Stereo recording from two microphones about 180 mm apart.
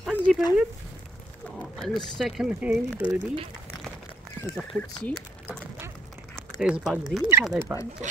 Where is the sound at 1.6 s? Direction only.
Centre (ahead or behind).